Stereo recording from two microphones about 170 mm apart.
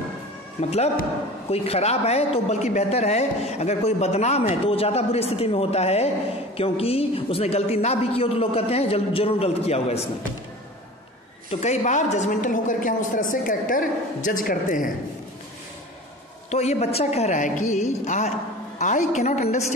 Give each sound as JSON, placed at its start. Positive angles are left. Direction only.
{"t": 0.6, "sound": "a woman's voice", "side_deg": 40}
{"t": 11.6, "sound": "a woman's voice", "side_deg": 45}
{"t": 16.4, "sound": "a woman's voice", "side_deg": 40}